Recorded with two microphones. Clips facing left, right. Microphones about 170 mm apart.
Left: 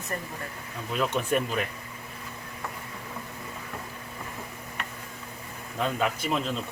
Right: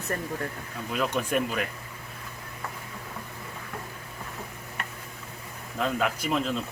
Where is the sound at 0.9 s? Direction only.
Centre (ahead or behind).